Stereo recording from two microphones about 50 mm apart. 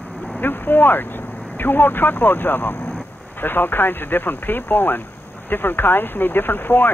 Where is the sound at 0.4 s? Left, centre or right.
Left.